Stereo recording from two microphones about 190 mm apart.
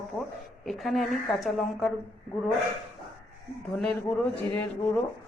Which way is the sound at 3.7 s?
Centre (ahead or behind).